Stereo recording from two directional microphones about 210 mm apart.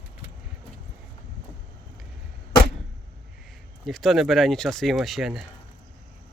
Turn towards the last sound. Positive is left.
turn(degrees=0)  # may be behind; listen again after turning